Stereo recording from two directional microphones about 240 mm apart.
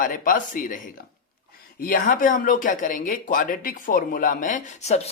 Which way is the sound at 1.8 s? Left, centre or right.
Left.